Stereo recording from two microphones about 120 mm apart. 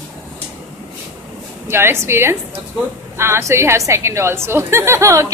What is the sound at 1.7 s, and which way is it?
A woman's voice, 20° right (ahead or behind).